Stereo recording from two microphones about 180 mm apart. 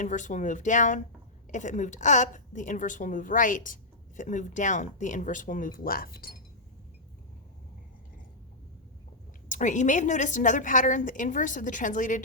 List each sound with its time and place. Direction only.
0.0 s a woman's voice: 45° left (ahead or behind)
9.5 s a woman's voice: 45° left (ahead or behind)